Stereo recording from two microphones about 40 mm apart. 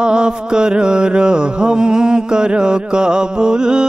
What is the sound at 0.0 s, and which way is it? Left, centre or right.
Mantra, right.